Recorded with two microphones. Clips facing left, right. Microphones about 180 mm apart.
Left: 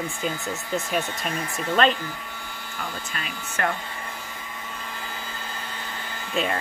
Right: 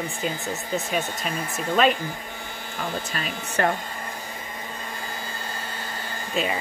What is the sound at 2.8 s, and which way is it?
Speech, 35° right (ahead or behind).